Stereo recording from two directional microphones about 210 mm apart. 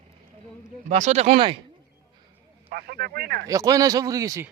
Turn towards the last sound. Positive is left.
turn(degrees=-15)  # may be behind; listen again after turning